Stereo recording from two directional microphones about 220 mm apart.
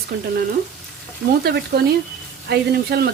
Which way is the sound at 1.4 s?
45° right (ahead or behind).